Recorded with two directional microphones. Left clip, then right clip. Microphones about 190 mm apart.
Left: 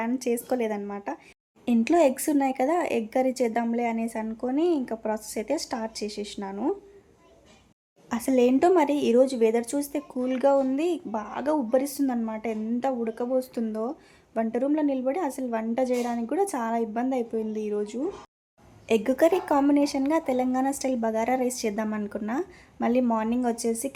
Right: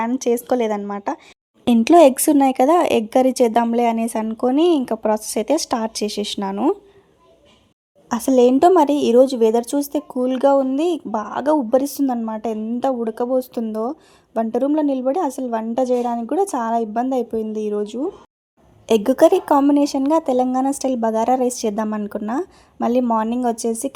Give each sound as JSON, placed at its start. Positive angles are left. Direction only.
{"t": 0.0, "sound": "a woman's voice", "side_deg": -20}
{"t": 1.6, "sound": "speech", "side_deg": -30}
{"t": 8.1, "sound": "a woman's voice", "side_deg": -30}